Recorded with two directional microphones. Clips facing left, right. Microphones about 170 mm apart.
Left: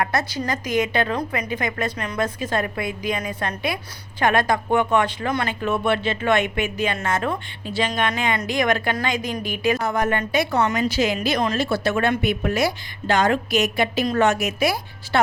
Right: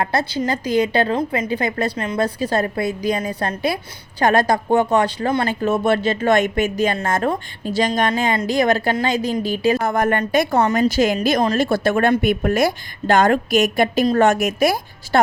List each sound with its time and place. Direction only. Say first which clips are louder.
0.0 s speech: right 3 dB; 30° right (ahead or behind)
9.8 s a woman's voice: right 4 dB; 50° right (ahead or behind)